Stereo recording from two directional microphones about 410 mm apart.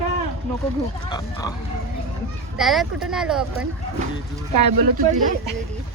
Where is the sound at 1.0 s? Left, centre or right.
Centre.